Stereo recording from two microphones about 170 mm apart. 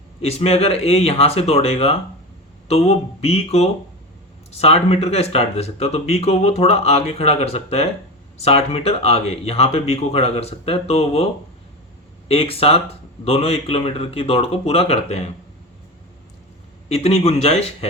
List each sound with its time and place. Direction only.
0.2 s speech: 40° left (ahead or behind)
12.3 s speech: 35° left (ahead or behind)
16.9 s speech: 35° left (ahead or behind)